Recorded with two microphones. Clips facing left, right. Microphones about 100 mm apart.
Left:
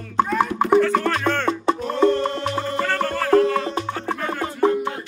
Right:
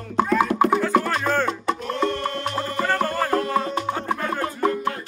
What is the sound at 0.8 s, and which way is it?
Music, 5° right (ahead or behind).